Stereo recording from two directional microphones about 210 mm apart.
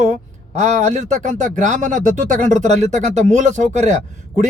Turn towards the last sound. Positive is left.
turn(degrees=-35)  # may be behind; listen again after turning